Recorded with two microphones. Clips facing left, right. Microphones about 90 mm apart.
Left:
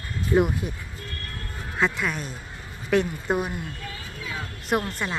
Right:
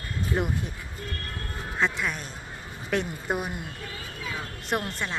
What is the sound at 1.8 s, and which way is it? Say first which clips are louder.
A woman's voice: left 3 dB; centre (ahead or behind).